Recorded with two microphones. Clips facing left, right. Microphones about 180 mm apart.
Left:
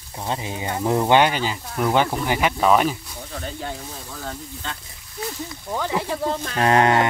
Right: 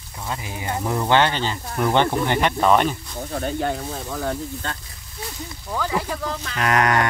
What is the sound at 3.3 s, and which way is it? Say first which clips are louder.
Speech: right 7 dB; 55° right (ahead or behind).